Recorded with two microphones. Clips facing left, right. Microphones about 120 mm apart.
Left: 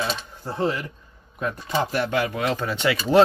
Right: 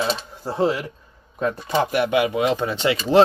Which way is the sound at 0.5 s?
30° right (ahead or behind).